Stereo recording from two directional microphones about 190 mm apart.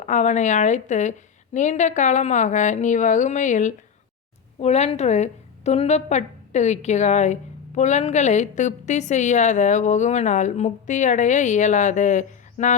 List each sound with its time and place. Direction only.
0.0 s a woman's voice: 40° left (ahead or behind)